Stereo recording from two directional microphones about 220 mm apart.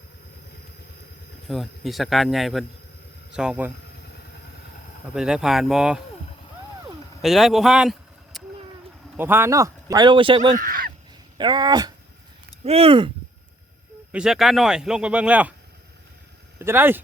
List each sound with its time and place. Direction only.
1.5 s speech: centre (ahead or behind)
5.1 s speech: 5° right (ahead or behind)
7.2 s a sound: centre (ahead or behind)
9.1 s a man's voice: 10° right (ahead or behind)
10.5 s speech: 40° right (ahead or behind)
11.3 s speech: 20° right (ahead or behind)
14.1 s speech: 5° right (ahead or behind)
16.6 s speech: 10° right (ahead or behind)